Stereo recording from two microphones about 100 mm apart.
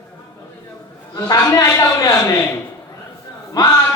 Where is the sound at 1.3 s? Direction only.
25° left (ahead or behind).